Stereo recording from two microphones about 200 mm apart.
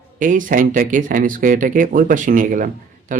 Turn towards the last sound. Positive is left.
turn(degrees=-40)  # may be behind; listen again after turning